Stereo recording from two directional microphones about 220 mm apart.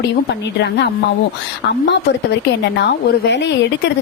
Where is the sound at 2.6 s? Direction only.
50° left (ahead or behind).